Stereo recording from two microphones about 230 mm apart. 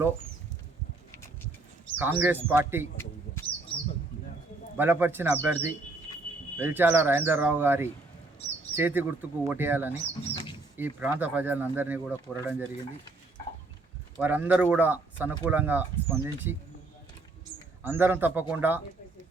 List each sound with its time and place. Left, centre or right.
2.0 s speech: centre
4.8 s speech: centre
10.0 s bird: left
10.8 s speech: centre
14.2 s speech: centre
17.8 s speech: centre